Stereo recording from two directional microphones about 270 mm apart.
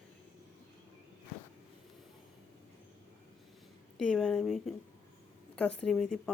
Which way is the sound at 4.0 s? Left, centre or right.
Centre.